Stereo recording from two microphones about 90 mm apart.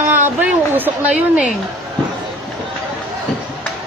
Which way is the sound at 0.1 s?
20° right (ahead or behind).